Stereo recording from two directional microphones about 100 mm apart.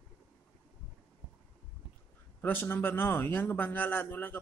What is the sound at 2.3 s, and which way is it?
A man's voice, 20° left (ahead or behind).